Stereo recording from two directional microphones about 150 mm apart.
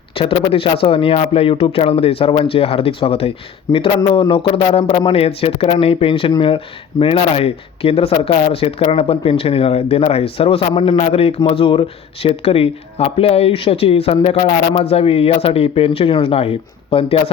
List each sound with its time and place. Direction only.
0.1 s a man's voice: 40° left (ahead or behind)